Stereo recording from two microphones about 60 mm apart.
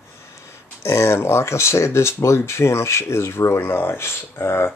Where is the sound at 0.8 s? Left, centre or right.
Left.